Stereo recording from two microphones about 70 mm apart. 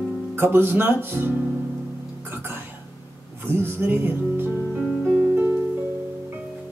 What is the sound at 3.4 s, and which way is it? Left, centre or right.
Music, right.